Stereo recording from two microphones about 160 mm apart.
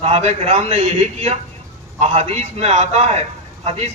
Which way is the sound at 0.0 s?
40° right (ahead or behind).